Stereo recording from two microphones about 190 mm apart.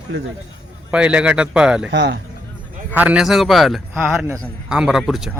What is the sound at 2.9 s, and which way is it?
A man's voice, 5° right (ahead or behind).